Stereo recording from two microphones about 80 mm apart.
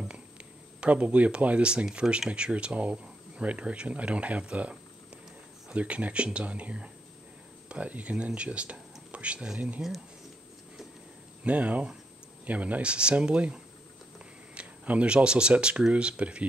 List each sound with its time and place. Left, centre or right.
0.7 s speech: centre
9.8 s speech: centre
11.4 s speech: centre